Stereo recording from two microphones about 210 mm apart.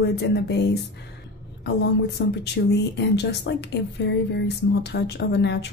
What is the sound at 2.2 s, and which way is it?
Speech, 55° left (ahead or behind).